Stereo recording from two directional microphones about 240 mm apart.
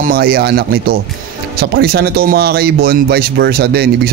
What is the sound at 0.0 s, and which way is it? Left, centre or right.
A man's voice, right.